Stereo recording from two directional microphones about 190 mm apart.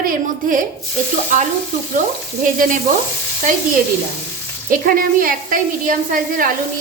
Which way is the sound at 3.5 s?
45° right (ahead or behind).